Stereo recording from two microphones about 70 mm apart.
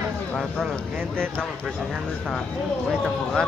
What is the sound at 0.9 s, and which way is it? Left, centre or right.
Speech, right.